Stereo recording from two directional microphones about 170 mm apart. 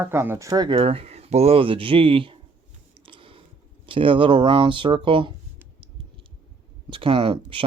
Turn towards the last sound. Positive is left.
turn(degrees=-30)  # may be behind; listen again after turning